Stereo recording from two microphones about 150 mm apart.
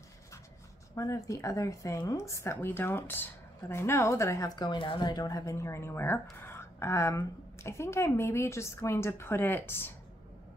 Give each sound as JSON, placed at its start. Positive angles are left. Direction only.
{"t": 0.9, "sound": "a woman's voice", "side_deg": 20}